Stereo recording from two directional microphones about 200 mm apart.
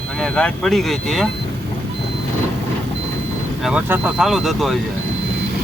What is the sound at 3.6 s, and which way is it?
Speech, 5° right (ahead or behind).